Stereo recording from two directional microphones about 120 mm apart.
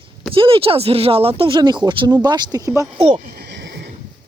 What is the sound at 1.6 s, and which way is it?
Speech, 40° right (ahead or behind).